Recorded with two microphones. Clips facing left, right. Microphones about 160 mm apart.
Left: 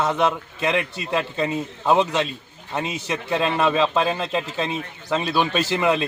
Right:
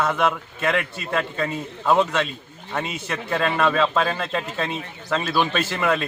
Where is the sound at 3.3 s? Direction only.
15° left (ahead or behind).